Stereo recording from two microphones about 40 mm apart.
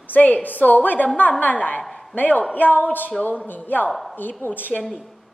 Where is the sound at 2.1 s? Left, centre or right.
Left.